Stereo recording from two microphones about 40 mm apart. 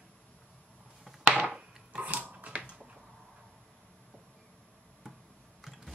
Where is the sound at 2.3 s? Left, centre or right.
Right.